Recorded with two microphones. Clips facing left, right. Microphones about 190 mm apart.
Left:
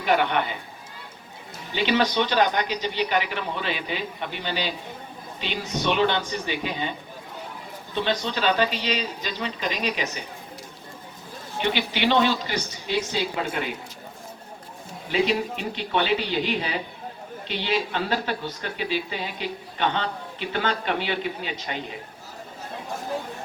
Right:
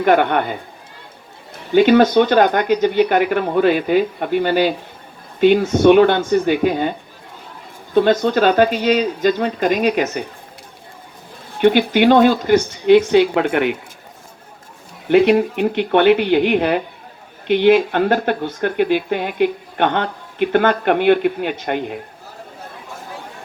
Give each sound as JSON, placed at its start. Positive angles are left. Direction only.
{"t": 0.0, "sound": "speech", "side_deg": -55}
{"t": 1.7, "sound": "speech", "side_deg": -50}
{"t": 7.9, "sound": "speech", "side_deg": -50}
{"t": 11.5, "sound": "speech", "side_deg": -55}
{"t": 15.1, "sound": "speech", "side_deg": -60}